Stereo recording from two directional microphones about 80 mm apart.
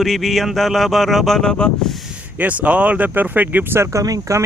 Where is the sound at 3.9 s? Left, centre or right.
Right.